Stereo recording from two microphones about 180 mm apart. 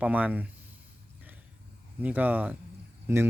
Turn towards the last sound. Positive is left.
turn(degrees=-15)  # may be behind; listen again after turning